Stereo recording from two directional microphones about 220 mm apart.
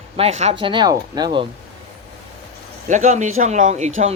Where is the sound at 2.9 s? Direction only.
35° right (ahead or behind).